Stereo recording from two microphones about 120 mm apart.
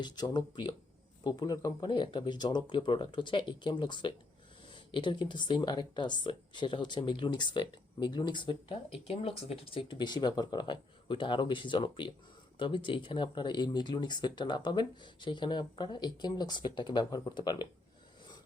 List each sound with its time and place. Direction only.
0.0 s speech: 40° left (ahead or behind)